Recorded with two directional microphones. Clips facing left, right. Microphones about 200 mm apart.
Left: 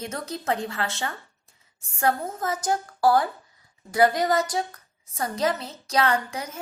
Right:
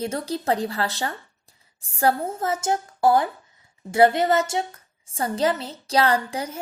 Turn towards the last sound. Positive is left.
turn(degrees=-30)  # may be behind; listen again after turning